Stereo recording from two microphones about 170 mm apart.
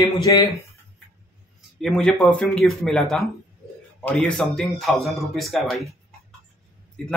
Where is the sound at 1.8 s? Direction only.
5° left (ahead or behind).